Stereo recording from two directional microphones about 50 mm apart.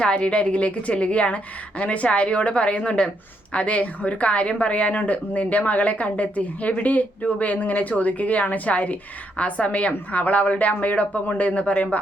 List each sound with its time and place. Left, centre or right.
0.0 s a woman's voice: left